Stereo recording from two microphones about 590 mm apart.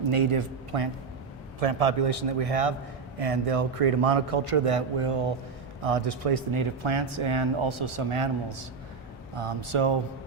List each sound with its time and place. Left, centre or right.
0.0 s speech: right
1.5 s a man's voice: right